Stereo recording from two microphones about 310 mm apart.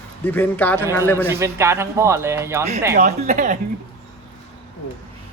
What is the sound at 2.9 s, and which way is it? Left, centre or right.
Speech, right.